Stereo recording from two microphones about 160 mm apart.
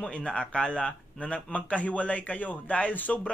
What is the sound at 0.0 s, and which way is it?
Speech, 5° left (ahead or behind).